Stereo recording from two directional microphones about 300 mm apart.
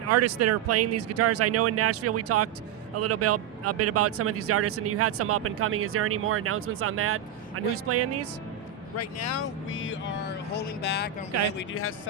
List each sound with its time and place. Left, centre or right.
0.1 s speech: right
9.0 s speech: left
9.6 s speech: left